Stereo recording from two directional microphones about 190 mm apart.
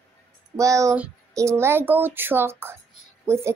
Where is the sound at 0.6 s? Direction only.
15° right (ahead or behind).